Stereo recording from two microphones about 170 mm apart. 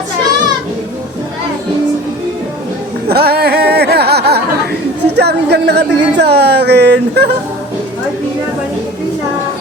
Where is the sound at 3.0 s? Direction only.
65° right (ahead or behind).